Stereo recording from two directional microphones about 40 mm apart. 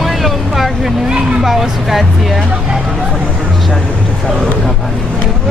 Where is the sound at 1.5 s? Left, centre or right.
Centre.